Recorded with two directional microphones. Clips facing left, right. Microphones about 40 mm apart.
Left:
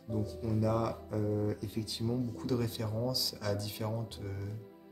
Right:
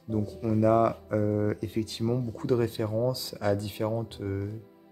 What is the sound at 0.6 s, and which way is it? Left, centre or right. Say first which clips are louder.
Speech: right 11 dB; right.